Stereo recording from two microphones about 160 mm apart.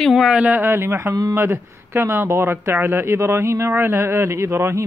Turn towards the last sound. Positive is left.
turn(degrees=-15)  # may be behind; listen again after turning